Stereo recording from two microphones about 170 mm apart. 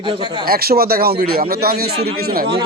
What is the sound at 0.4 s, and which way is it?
A man's voice, 65° right (ahead or behind).